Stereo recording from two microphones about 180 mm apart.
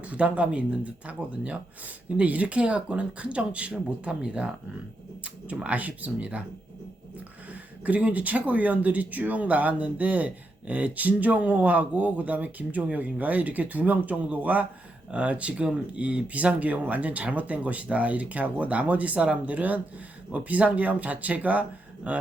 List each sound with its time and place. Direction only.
0.0 s speech: 5° right (ahead or behind)
7.5 s speech: 10° right (ahead or behind)